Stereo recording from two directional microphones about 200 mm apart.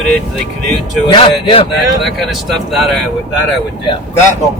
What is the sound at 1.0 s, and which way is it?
Speech, 25° left (ahead or behind).